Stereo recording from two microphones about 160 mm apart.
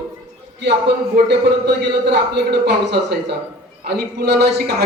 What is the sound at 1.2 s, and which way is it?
A man's voice, 90° right.